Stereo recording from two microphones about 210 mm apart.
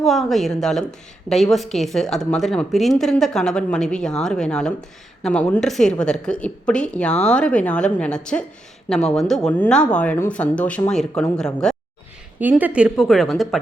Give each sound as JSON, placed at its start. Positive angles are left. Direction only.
{"t": 0.0, "sound": "a woman's voice", "side_deg": 0}
{"t": 12.4, "sound": "a woman's voice", "side_deg": -10}